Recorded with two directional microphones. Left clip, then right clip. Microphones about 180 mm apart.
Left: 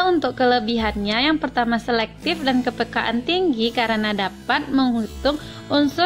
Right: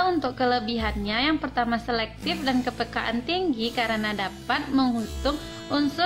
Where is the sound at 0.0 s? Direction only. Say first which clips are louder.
Left 5 dB; 35° left (ahead or behind).